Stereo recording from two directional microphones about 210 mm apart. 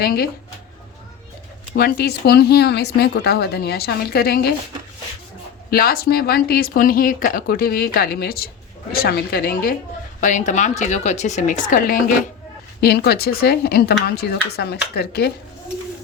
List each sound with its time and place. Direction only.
0.0 s speech: 45° left (ahead or behind)
1.7 s speech: 45° left (ahead or behind)
5.7 s a woman's voice: 45° left (ahead or behind)